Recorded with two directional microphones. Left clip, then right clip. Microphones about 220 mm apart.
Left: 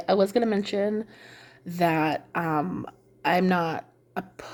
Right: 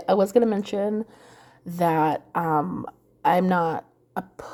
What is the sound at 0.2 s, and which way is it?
Speech, 30° right (ahead or behind).